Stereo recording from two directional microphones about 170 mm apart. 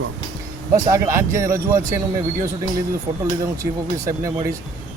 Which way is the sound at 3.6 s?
20° right (ahead or behind).